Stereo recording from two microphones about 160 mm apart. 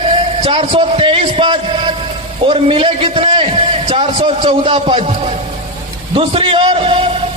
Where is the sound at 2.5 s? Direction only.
30° right (ahead or behind).